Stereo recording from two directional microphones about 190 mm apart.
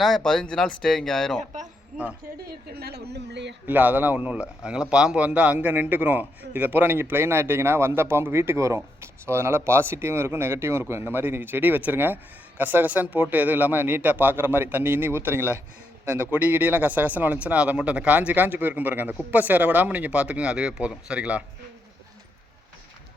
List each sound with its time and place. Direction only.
0.0 s speech: centre (ahead or behind)
1.4 s a woman's voice: 40° right (ahead or behind); by 3.5 s 65° right (ahead or behind)
3.7 s a man's voice: 10° right (ahead or behind)